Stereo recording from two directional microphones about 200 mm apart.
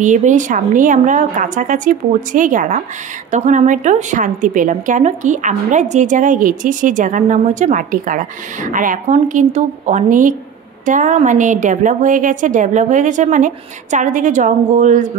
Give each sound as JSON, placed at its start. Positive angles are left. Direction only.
{"t": 0.0, "sound": "a woman's voice", "side_deg": -40}